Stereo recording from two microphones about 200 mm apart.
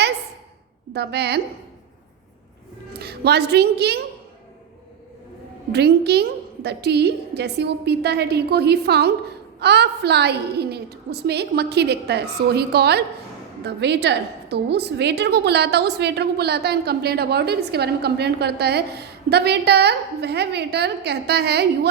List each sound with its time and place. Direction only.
0.9 s a woman's voice: 55° right (ahead or behind)
2.9 s a woman's voice: 55° right (ahead or behind)
5.7 s a woman's voice: 55° right (ahead or behind)